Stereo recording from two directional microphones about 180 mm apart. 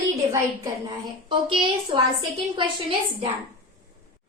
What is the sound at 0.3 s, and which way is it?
A woman's voice, 20° right (ahead or behind).